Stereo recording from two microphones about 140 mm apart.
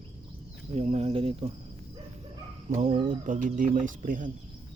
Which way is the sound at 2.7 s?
55° right (ahead or behind).